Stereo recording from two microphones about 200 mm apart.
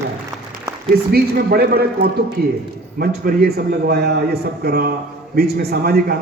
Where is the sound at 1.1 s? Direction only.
50° right (ahead or behind).